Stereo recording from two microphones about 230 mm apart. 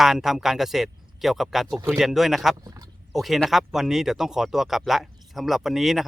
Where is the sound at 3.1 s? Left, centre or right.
Centre.